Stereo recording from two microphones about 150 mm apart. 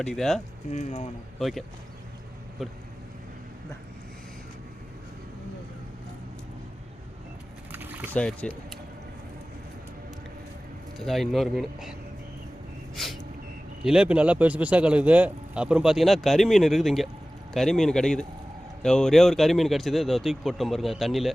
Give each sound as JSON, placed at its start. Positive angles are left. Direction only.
{"t": 0.0, "sound": "a man's voice", "side_deg": 5}
{"t": 0.7, "sound": "speech", "side_deg": 50}
{"t": 1.4, "sound": "a man's voice", "side_deg": 0}
{"t": 7.7, "sound": "a sound", "side_deg": -10}
{"t": 8.1, "sound": "speech", "side_deg": 10}
{"t": 10.9, "sound": "a man's voice", "side_deg": 0}
{"t": 13.0, "sound": "a sound", "side_deg": 0}
{"t": 13.8, "sound": "a man's voice", "side_deg": -5}